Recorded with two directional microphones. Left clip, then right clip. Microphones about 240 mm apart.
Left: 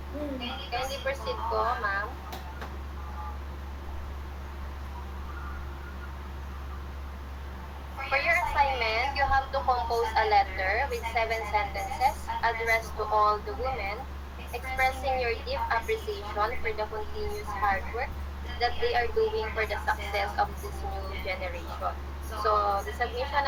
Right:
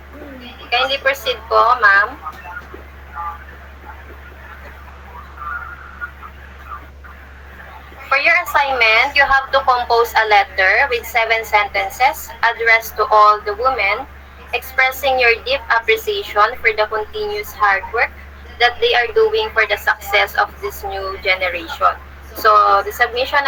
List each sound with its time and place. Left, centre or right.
0.7 s a woman's voice: right
8.1 s a woman's voice: right